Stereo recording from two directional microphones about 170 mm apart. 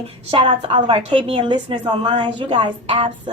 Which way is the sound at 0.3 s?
30° right (ahead or behind).